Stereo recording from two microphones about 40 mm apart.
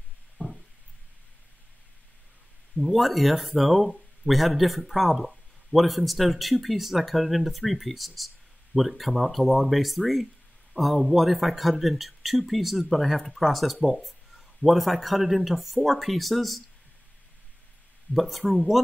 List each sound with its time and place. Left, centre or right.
2.8 s a man's voice: centre
18.1 s speech: centre